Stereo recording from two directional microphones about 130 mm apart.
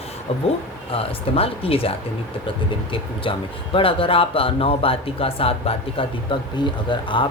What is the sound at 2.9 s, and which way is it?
Speech, 40° left (ahead or behind).